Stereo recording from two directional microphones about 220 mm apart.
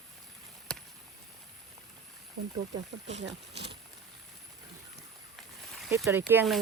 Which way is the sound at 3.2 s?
50° right (ahead or behind).